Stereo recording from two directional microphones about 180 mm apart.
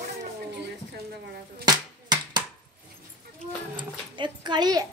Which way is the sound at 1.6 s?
20° right (ahead or behind).